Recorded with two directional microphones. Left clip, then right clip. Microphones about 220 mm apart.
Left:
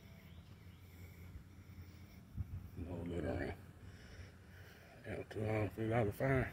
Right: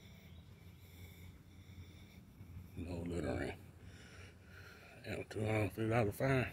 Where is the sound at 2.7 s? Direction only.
15° right (ahead or behind).